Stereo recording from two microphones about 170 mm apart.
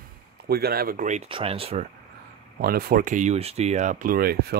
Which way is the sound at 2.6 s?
65° right (ahead or behind).